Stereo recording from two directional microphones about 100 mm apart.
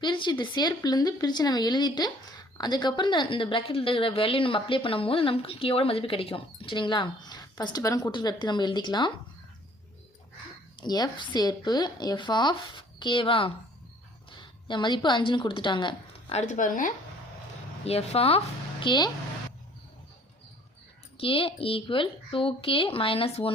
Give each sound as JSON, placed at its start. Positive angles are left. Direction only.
{"t": 0.0, "sound": "a woman's voice", "side_deg": 50}
{"t": 10.8, "sound": "a woman's voice", "side_deg": 45}
{"t": 17.8, "sound": "a woman's voice", "side_deg": 90}
{"t": 18.9, "sound": "a woman's voice", "side_deg": 45}
{"t": 21.2, "sound": "a woman's voice", "side_deg": 65}